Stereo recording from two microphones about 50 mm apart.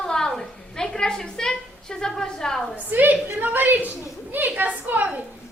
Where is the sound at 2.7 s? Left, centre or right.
Right.